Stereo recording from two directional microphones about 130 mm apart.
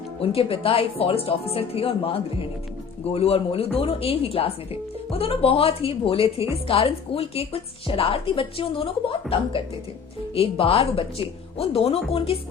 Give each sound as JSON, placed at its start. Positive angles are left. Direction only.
{"t": 0.2, "sound": "a woman's voice", "side_deg": 45}